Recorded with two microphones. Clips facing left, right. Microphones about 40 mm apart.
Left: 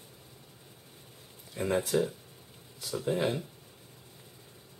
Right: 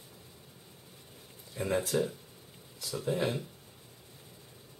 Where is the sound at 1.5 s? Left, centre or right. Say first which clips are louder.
Left 2 dB; centre.